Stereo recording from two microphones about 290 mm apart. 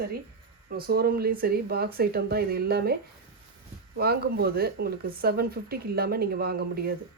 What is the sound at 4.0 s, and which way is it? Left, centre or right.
Speech, right.